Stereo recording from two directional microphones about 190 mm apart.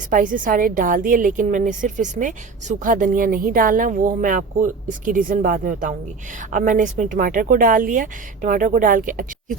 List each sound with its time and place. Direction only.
0.1 s a woman's voice: 45° right (ahead or behind)